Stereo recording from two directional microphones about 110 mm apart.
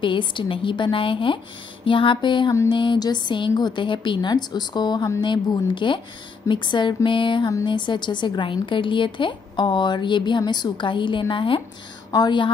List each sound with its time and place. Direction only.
0.0 s a woman's voice: 50° left (ahead or behind)